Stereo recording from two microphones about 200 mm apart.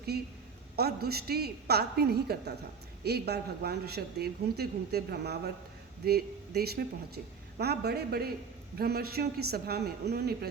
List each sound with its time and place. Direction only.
0.1 s speech: 50° right (ahead or behind)